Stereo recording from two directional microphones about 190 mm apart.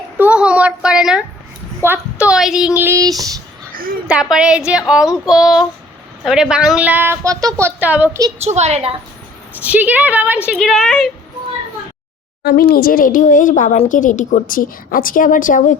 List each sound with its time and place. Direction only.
0.2 s a woman's voice: 5° right (ahead or behind)
4.1 s a woman's voice: 5° right (ahead or behind)
8.4 s a woman's voice: 35° right (ahead or behind)
9.6 s a woman's voice: 10° right (ahead or behind)
12.4 s speech: 50° left (ahead or behind)